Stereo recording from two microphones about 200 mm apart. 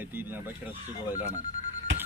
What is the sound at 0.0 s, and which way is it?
Speech, 10° right (ahead or behind).